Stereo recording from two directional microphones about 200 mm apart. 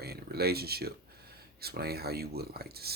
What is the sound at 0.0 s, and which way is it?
Speech, 50° right (ahead or behind).